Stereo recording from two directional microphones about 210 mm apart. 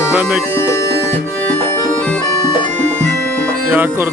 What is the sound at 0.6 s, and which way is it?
Music, 15° left (ahead or behind).